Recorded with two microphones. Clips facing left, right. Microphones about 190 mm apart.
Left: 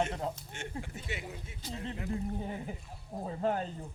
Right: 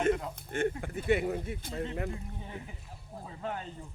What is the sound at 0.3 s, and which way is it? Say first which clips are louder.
Speech: right 10 dB; 55° right (ahead or behind).